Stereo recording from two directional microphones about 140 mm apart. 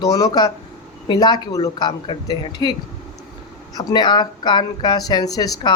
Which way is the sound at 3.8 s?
30° left (ahead or behind).